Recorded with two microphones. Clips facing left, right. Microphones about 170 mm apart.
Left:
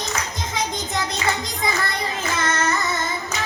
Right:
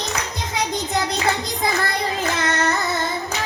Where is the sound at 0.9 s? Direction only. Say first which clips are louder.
Right 3 dB; 35° right (ahead or behind).